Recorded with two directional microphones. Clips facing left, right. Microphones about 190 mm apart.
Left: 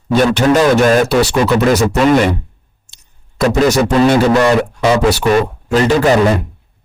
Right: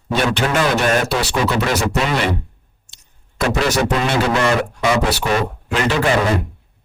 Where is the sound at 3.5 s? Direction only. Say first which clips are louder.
Left 6 dB; 40° left (ahead or behind).